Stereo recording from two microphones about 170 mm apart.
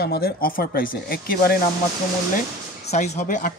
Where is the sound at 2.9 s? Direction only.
40° left (ahead or behind).